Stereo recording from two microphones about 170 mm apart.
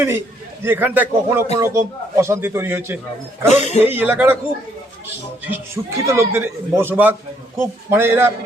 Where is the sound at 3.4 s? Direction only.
45° left (ahead or behind).